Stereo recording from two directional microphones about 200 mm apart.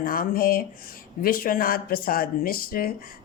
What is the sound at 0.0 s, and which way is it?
Speech, 45° left (ahead or behind).